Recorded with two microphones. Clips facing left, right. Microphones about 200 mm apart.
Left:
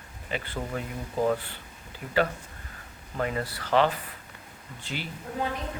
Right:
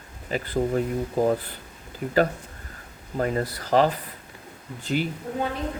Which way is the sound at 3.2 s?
40° right (ahead or behind).